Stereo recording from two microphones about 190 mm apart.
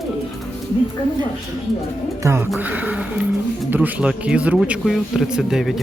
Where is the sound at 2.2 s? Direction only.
15° right (ahead or behind).